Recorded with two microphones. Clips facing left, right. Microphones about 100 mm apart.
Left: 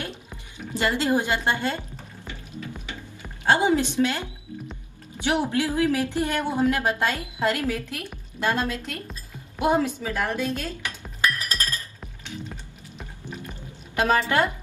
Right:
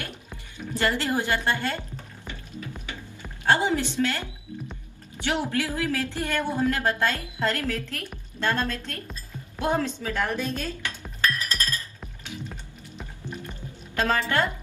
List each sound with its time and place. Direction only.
0.0 s speech: 20° left (ahead or behind)
2.2 s music: 20° left (ahead or behind)
3.4 s speech: 15° left (ahead or behind)
9.6 s dishes: 15° left (ahead or behind)
12.4 s music: centre (ahead or behind)
13.9 s a woman's voice: 15° left (ahead or behind)